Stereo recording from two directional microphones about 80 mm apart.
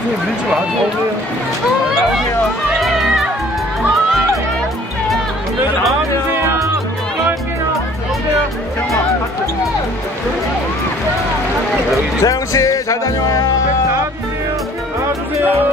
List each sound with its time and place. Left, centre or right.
2.7 s music: centre
6.4 s music: right
12.2 s speech: left